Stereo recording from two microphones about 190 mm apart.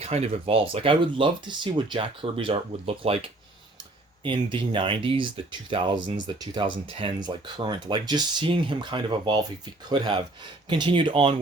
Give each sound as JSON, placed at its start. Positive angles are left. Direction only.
{"t": 0.0, "sound": "speech", "side_deg": -35}